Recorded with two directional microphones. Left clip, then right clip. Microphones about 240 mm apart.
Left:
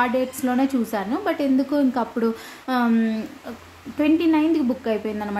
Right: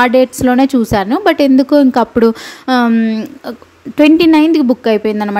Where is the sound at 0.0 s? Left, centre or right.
Right.